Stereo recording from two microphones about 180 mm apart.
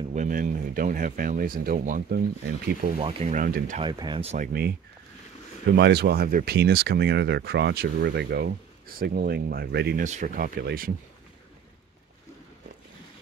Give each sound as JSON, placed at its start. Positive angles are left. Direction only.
{"t": 0.1, "sound": "speech", "side_deg": -45}
{"t": 3.0, "sound": "speech", "side_deg": -30}
{"t": 3.8, "sound": "speech", "side_deg": -25}
{"t": 4.3, "sound": "speech", "side_deg": -50}
{"t": 5.7, "sound": "speech", "side_deg": -70}
{"t": 10.0, "sound": "speech", "side_deg": -45}